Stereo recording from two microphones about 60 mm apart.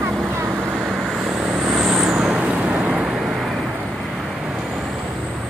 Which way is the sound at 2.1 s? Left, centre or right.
Right.